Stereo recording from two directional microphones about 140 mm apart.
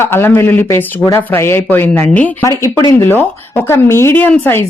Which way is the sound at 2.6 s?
20° left (ahead or behind).